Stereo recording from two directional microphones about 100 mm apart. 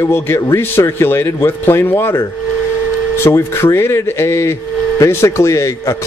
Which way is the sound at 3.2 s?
30° left (ahead or behind).